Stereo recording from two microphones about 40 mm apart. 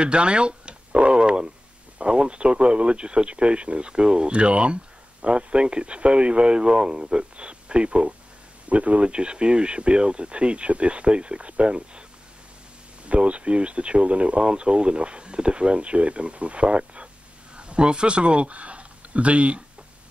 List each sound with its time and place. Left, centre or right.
0.0 s telephone: right
2.0 s speech: right
13.0 s speech: right